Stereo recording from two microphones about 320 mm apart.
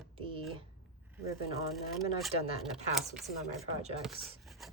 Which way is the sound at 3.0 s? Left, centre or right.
Centre.